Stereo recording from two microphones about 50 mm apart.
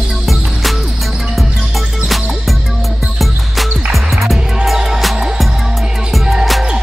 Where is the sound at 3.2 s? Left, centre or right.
Centre.